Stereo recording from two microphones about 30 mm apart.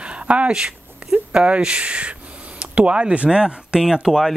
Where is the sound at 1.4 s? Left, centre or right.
Right; by 4.3 s centre.